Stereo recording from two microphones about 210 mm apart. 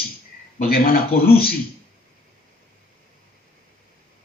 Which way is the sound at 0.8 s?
45° left (ahead or behind).